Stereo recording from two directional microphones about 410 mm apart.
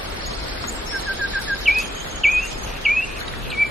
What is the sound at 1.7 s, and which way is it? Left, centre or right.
Bird vocalization, centre.